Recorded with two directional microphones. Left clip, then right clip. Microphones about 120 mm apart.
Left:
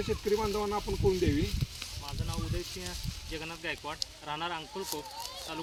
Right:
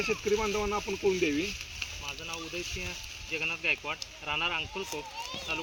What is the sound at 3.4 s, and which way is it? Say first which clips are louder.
Speech: right 9 dB; 5° left (ahead or behind).